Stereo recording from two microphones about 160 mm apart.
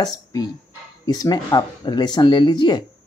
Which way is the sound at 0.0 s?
25° left (ahead or behind).